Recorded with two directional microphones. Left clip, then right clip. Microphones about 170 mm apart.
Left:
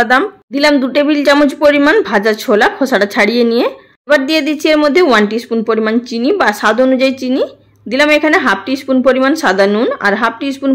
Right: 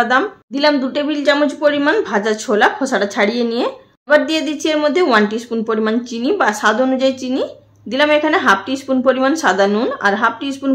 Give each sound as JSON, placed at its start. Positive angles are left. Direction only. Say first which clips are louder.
{"t": 0.1, "sound": "a woman's voice", "louder": "left 4 dB", "side_deg": 25}